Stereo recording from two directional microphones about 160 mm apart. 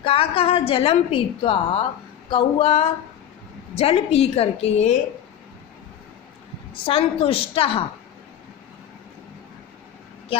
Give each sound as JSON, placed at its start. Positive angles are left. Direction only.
{"t": 0.0, "sound": "a woman's voice", "side_deg": 35}
{"t": 6.8, "sound": "a woman's voice", "side_deg": 35}